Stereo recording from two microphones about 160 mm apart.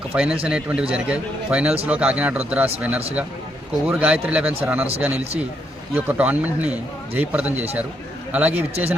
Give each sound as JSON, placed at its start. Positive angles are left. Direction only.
{"t": 0.1, "sound": "a man's voice", "side_deg": -5}
{"t": 5.9, "sound": "a man's voice", "side_deg": -10}
{"t": 8.7, "sound": "speech", "side_deg": -40}